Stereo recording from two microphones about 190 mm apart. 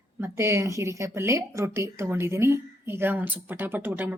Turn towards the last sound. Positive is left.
turn(degrees=-10)  # may be behind; listen again after turning